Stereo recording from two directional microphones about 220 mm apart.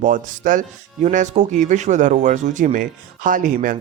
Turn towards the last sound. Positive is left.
turn(degrees=-35)  # may be behind; listen again after turning